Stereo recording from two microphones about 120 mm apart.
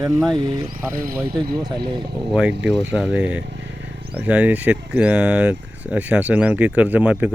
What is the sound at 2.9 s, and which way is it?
Speech, 10° right (ahead or behind).